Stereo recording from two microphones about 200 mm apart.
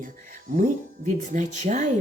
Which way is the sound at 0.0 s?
45° right (ahead or behind).